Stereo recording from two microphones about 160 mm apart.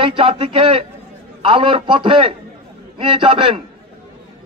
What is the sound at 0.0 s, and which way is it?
A man's voice, 35° right (ahead or behind).